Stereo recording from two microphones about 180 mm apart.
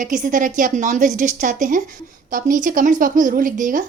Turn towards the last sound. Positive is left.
turn(degrees=-45)  # may be behind; listen again after turning